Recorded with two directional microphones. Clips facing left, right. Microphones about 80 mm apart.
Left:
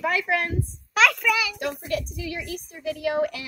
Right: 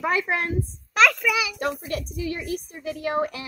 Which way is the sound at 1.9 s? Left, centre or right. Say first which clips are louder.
Even; right.